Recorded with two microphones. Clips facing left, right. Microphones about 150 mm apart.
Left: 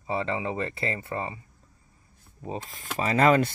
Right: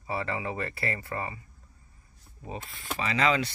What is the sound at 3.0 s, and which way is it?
Speech, 45° left (ahead or behind).